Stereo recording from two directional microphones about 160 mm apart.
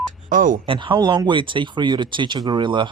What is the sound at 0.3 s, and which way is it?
Speech, 55° right (ahead or behind).